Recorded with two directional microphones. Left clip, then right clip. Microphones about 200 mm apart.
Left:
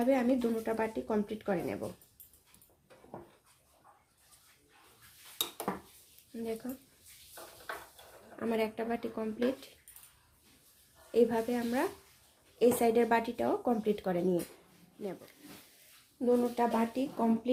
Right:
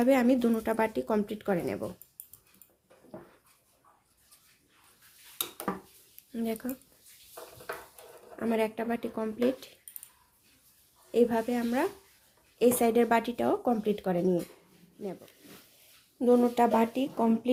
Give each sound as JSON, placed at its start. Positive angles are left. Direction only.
{"t": 0.0, "sound": "speech", "side_deg": -25}
{"t": 6.3, "sound": "speech", "side_deg": -30}
{"t": 8.4, "sound": "speech", "side_deg": -20}
{"t": 11.1, "sound": "speech", "side_deg": -20}
{"t": 16.1, "sound": "speech", "side_deg": -30}